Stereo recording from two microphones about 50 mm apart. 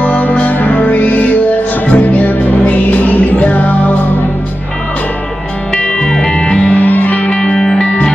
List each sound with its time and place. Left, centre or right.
0.0 s music: left
5.8 s music: centre
6.8 s music: left
7.3 s music: centre